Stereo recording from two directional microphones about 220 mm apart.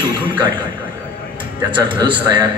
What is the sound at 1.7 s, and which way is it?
Speech, 20° right (ahead or behind).